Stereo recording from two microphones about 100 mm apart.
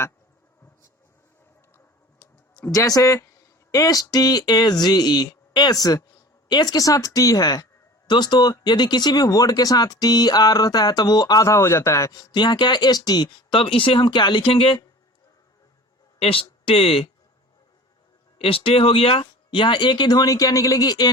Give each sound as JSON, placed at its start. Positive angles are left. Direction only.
{"t": 2.6, "sound": "speech", "side_deg": 35}
{"t": 13.5, "sound": "speech", "side_deg": 60}
{"t": 14.4, "sound": "speech", "side_deg": 65}
{"t": 16.1, "sound": "speech", "side_deg": 65}
{"t": 18.3, "sound": "speech", "side_deg": 70}
{"t": 19.2, "sound": "speech", "side_deg": 55}